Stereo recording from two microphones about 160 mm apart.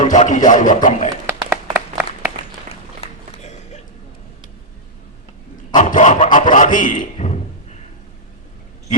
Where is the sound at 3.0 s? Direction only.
45° left (ahead or behind).